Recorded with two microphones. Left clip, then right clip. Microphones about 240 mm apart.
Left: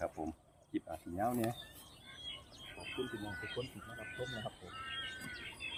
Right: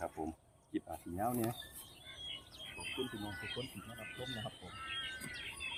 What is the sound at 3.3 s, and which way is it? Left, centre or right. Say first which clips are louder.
Speech: left 1 dB; right.